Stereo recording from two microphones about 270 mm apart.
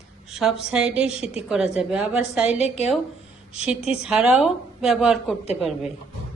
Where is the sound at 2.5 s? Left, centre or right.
Left.